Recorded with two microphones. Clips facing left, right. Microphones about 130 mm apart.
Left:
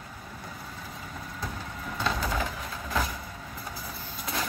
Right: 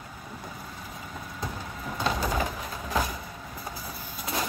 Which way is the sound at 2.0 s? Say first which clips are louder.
Right 2 dB; 15° right (ahead or behind).